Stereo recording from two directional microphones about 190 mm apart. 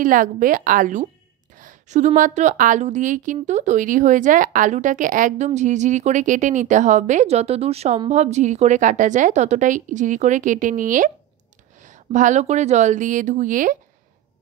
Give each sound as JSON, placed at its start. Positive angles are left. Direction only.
{"t": 0.0, "sound": "a woman's voice", "side_deg": -45}